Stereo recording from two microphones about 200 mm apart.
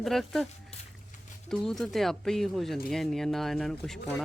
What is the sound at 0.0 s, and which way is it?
Speech, centre (ahead or behind).